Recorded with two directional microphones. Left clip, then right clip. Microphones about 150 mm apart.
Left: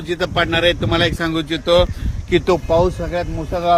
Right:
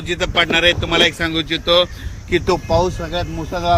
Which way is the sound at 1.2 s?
90° left.